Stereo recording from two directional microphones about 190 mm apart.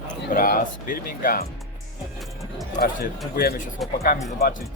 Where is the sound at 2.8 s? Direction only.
55° left (ahead or behind).